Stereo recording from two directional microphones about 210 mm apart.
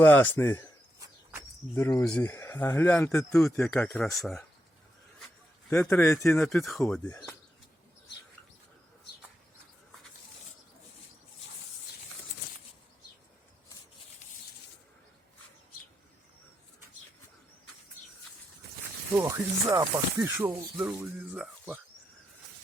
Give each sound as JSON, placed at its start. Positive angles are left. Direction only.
{"t": 0.0, "sound": "speech", "side_deg": 10}
{"t": 0.9, "sound": "cricket", "side_deg": -15}
{"t": 1.7, "sound": "speech", "side_deg": 10}
{"t": 5.7, "sound": "speech", "side_deg": 5}
{"t": 19.1, "sound": "speech", "side_deg": -15}